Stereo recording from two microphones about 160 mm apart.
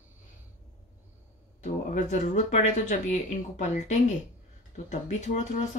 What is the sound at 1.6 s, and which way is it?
Speech, 50° left (ahead or behind).